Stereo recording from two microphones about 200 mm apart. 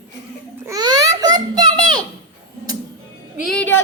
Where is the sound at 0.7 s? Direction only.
20° right (ahead or behind).